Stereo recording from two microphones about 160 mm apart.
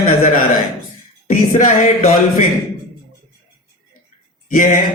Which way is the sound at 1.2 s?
55° left (ahead or behind).